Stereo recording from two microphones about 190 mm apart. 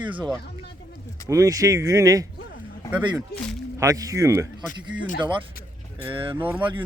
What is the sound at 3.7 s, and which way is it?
Speech, 15° right (ahead or behind).